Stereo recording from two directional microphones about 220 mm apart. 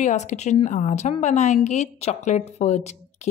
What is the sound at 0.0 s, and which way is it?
A woman's voice, 30° left (ahead or behind).